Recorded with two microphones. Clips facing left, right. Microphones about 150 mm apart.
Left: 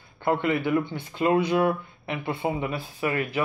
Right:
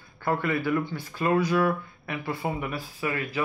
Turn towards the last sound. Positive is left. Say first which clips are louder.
# left 3 dB
turn(degrees=25)  # may be behind; listen again after turning